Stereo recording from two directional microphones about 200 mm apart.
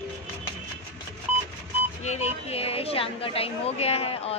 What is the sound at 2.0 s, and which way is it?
A woman's voice, 35° left (ahead or behind).